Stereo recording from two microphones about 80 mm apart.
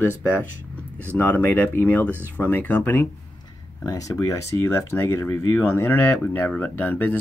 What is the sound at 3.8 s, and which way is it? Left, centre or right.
Speech, left.